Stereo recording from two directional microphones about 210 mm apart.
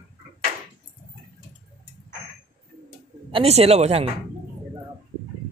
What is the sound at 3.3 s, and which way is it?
Speech, 30° right (ahead or behind).